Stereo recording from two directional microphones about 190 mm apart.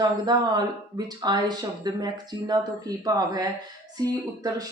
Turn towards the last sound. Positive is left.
turn(degrees=-20)  # may be behind; listen again after turning